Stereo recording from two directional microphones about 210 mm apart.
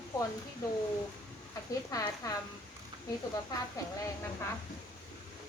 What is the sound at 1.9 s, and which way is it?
Speech, 15° left (ahead or behind).